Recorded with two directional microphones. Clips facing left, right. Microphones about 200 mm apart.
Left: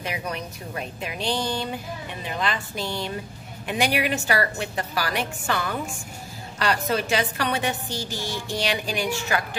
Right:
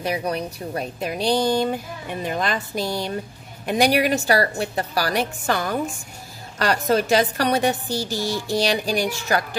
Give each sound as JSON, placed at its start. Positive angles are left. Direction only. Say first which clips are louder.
{"t": 0.0, "sound": "a woman's voice", "louder": "right 6 dB", "side_deg": -35}